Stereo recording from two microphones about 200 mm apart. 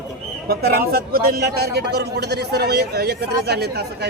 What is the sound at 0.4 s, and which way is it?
A man's voice, 50° right (ahead or behind).